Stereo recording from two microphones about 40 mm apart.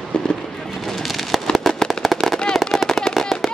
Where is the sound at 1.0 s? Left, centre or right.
Centre.